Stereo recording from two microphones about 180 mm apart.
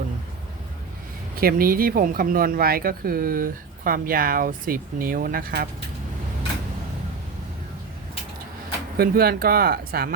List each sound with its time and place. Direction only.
1.4 s speech: 55° right (ahead or behind)
9.0 s speech: 60° right (ahead or behind)